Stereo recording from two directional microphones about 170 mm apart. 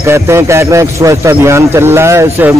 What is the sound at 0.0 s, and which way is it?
A man's voice, 15° right (ahead or behind).